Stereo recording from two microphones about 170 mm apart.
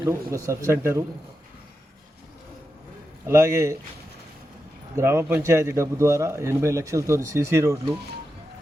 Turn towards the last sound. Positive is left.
turn(degrees=-20)  # may be behind; listen again after turning